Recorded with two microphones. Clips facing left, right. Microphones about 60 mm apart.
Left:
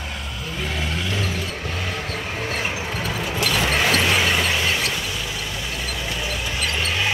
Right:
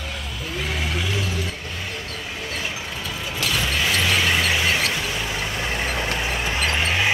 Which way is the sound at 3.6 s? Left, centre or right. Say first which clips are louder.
Left 4 dB; left.